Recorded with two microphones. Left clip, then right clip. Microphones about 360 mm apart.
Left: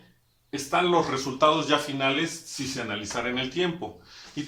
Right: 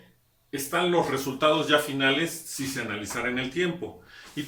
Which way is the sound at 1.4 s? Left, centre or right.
Centre.